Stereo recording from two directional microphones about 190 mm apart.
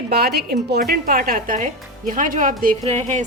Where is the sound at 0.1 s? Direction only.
55° right (ahead or behind).